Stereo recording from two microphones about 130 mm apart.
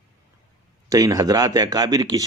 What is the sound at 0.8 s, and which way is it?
Speech, 25° right (ahead or behind).